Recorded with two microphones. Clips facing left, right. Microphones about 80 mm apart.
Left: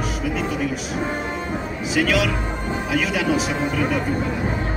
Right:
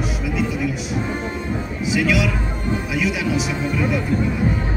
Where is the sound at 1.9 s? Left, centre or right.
Left.